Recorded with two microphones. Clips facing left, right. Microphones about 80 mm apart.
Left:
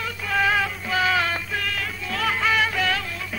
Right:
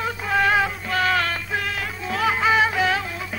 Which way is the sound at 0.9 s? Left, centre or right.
Centre.